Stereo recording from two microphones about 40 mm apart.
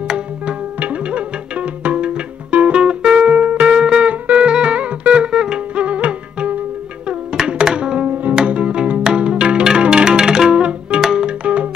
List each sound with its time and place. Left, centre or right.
0.7 s music: right
3.7 s music: right
5.9 s music: right
7.3 s music: right
8.1 s music: right
8.4 s music: right
10.5 s music: right